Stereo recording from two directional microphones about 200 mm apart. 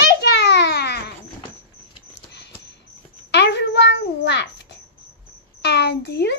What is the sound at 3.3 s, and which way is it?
A child's voice, 60° left (ahead or behind).